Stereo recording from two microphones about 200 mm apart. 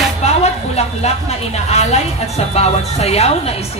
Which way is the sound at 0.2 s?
35° left (ahead or behind).